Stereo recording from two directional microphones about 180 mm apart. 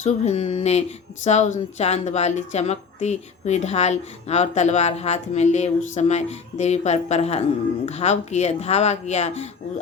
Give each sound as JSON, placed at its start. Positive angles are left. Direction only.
{"t": 0.0, "sound": "speech", "side_deg": 35}